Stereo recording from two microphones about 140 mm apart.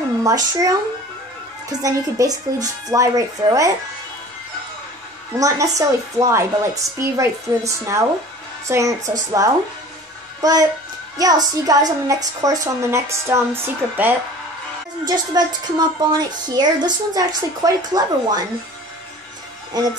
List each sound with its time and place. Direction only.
0.2 s a woman's voice: 25° right (ahead or behind)
5.3 s a woman's voice: 25° right (ahead or behind)
15.0 s a woman's voice: 30° right (ahead or behind)